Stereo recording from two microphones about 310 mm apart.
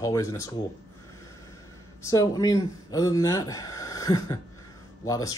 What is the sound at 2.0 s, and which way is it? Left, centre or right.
Speech, centre.